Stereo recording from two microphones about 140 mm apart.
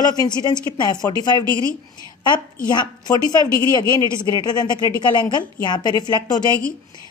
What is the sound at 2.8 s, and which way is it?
A woman's voice, 30° left (ahead or behind).